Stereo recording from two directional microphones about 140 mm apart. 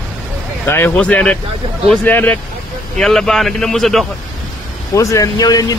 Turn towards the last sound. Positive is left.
turn(degrees=25)  # may be behind; listen again after turning